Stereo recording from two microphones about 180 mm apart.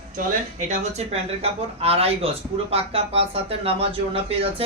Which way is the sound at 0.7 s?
35° right (ahead or behind).